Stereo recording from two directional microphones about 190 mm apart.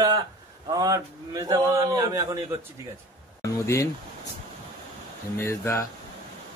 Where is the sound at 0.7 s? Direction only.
20° right (ahead or behind).